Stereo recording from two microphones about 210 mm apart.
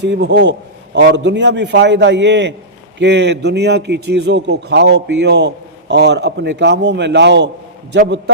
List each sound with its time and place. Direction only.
0.0 s a man's voice: 55° right (ahead or behind)